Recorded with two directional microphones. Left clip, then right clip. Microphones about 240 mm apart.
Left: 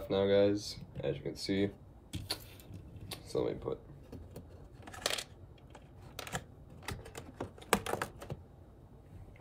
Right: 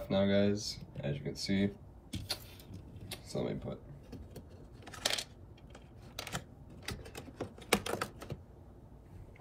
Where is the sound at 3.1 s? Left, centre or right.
Left.